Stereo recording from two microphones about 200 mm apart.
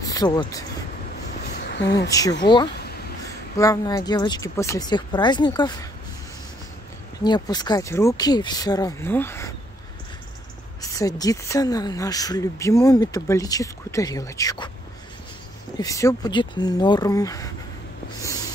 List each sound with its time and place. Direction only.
0.0 s speech: 20° left (ahead or behind)
1.7 s speech: 60° left (ahead or behind)
2.0 s a woman's voice: 15° left (ahead or behind)
7.2 s a woman's voice: 20° left (ahead or behind)
10.8 s speech: 15° left (ahead or behind)
15.8 s a woman's voice: 15° left (ahead or behind)